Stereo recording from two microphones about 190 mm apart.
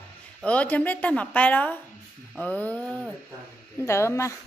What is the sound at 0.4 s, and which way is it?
A woman's voice, 5° left (ahead or behind).